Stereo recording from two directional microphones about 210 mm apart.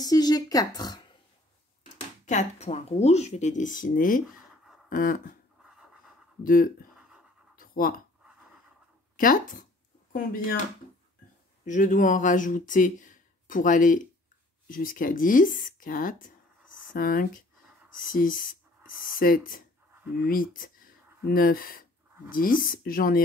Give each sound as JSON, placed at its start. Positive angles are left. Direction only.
{"t": 0.0, "sound": "speech", "side_deg": 20}
{"t": 2.2, "sound": "speech", "side_deg": 35}
{"t": 4.8, "sound": "a sound", "side_deg": 40}
{"t": 6.4, "sound": "speech", "side_deg": 40}
{"t": 7.5, "sound": "a sound", "side_deg": 45}
{"t": 9.1, "sound": "speech", "side_deg": 40}
{"t": 11.6, "sound": "speech", "side_deg": 35}